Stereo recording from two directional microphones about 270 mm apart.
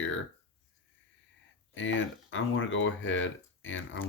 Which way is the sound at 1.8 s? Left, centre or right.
Left.